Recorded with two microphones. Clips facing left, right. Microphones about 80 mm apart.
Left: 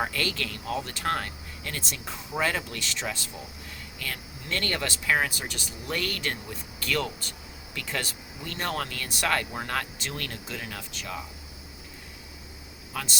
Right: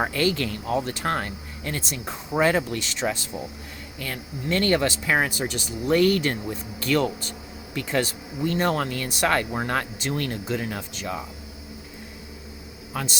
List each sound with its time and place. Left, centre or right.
0.0 s speech: right
12.9 s speech: right